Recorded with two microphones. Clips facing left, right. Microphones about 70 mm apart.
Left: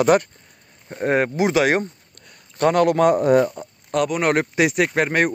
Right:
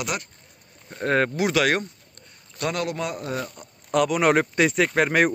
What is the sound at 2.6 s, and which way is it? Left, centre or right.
Speech, left.